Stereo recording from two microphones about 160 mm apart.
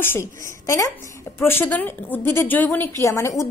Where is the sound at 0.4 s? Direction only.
20° left (ahead or behind).